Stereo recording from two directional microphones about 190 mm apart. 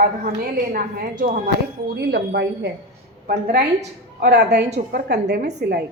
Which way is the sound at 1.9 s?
60° right (ahead or behind).